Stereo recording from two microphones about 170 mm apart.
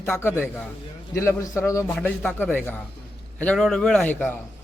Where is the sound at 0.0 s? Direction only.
15° left (ahead or behind).